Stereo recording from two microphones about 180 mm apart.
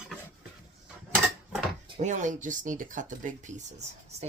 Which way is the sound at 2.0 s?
45° right (ahead or behind).